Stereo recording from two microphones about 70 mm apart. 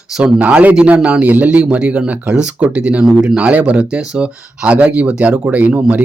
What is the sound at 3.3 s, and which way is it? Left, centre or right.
Speech, centre.